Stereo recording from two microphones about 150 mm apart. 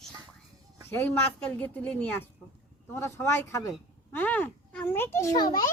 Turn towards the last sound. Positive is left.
turn(degrees=25)  # may be behind; listen again after turning